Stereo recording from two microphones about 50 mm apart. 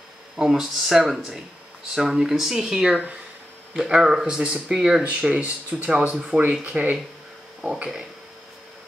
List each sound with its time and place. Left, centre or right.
0.4 s speech: centre
5.4 s speech: right
7.6 s speech: centre